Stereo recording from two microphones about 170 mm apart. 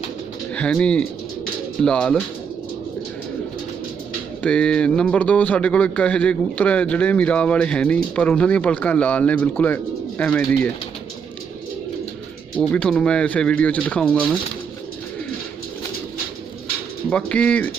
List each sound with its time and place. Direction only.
0.5 s speech: 5° left (ahead or behind)
4.4 s speech: 5° left (ahead or behind)
12.5 s speech: 5° left (ahead or behind)
17.1 s speech: 5° left (ahead or behind)